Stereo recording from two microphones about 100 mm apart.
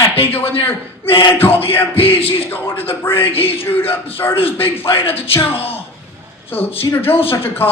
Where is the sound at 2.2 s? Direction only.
70° left (ahead or behind).